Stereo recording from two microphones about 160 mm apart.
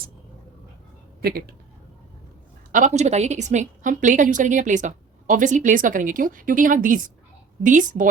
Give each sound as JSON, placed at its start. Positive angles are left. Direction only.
{"t": 1.2, "sound": "speech", "side_deg": -80}
{"t": 2.7, "sound": "a woman's voice", "side_deg": -50}